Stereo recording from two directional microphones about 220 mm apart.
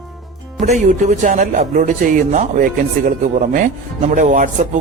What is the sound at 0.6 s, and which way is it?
Speech, 30° right (ahead or behind).